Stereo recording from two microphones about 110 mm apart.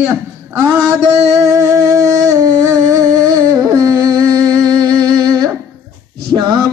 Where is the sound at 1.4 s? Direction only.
30° right (ahead or behind).